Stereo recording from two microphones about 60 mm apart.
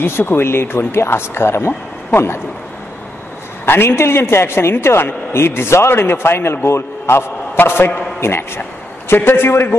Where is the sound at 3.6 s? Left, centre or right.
Left.